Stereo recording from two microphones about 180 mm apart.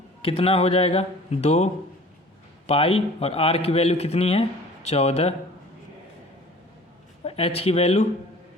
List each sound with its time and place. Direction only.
0.2 s a man's voice: 30° left (ahead or behind)
7.3 s a man's voice: 35° left (ahead or behind)